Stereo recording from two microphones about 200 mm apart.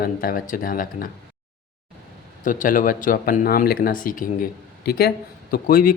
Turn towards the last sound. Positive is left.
turn(degrees=45)  # may be behind; listen again after turning